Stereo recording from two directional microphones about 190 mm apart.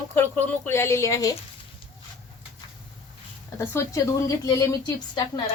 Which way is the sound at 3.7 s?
15° left (ahead or behind).